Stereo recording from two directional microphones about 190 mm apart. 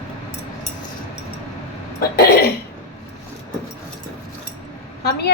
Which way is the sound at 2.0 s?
55° left (ahead or behind).